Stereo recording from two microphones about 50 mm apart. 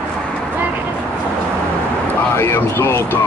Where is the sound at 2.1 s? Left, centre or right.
Left.